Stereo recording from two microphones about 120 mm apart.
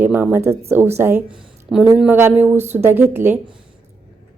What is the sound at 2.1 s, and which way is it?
A woman's voice, 15° right (ahead or behind).